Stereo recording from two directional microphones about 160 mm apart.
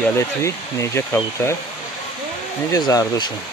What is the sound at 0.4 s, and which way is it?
Speech, 20° left (ahead or behind).